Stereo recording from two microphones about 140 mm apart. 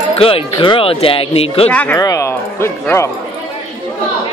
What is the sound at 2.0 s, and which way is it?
Speech, 25° left (ahead or behind).